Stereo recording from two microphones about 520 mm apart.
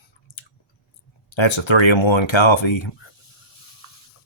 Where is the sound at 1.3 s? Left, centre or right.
Left.